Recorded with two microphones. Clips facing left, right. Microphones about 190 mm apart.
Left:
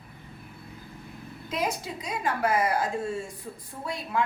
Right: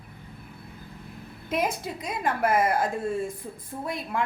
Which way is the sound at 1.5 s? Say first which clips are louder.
Right 2 dB; 55° right (ahead or behind).